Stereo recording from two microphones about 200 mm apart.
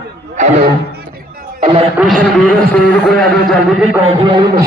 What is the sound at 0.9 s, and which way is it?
Music, 50° right (ahead or behind).